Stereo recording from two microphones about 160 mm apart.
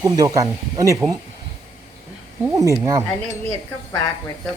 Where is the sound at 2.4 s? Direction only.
20° right (ahead or behind).